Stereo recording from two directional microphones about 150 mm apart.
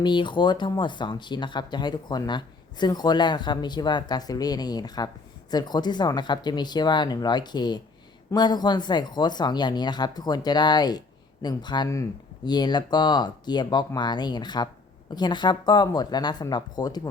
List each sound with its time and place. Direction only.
0.0 s speech: 30° left (ahead or behind)